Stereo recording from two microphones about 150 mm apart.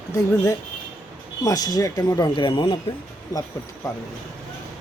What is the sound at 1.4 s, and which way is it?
Speech, 25° left (ahead or behind).